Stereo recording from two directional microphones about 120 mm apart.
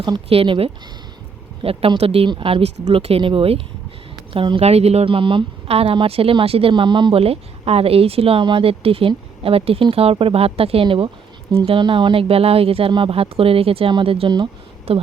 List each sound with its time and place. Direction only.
0.3 s speech: 50° right (ahead or behind)
14.9 s speech: 55° right (ahead or behind)